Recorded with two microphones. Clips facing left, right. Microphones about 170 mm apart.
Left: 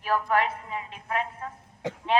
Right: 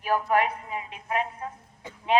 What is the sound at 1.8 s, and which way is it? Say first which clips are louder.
Speech: left 11 dB; 85° left.